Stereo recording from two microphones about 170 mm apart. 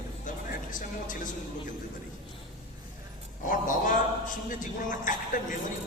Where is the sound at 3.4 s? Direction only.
50° left (ahead or behind).